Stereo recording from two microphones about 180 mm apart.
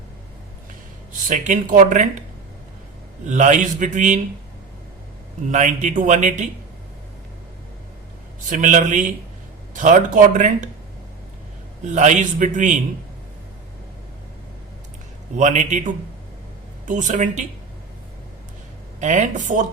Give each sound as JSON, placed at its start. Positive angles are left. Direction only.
{"t": 1.3, "sound": "speech", "side_deg": -45}
{"t": 3.2, "sound": "speech", "side_deg": -40}
{"t": 5.5, "sound": "speech", "side_deg": -40}
{"t": 8.4, "sound": "speech", "side_deg": -45}
{"t": 11.9, "sound": "speech", "side_deg": -40}
{"t": 15.4, "sound": "a man's voice", "side_deg": -40}
{"t": 18.9, "sound": "speech", "side_deg": -40}